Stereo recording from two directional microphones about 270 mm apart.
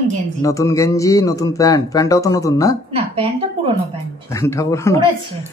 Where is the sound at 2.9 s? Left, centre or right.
Right.